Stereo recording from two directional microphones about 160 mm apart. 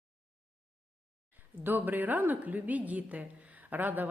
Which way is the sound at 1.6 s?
10° right (ahead or behind).